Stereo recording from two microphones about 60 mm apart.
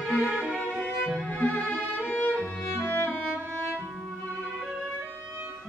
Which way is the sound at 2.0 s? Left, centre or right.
Left.